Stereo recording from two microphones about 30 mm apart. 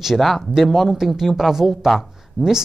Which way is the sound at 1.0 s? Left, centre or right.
Centre.